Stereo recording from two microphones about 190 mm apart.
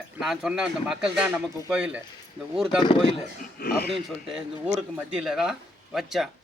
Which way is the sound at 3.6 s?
55° left (ahead or behind).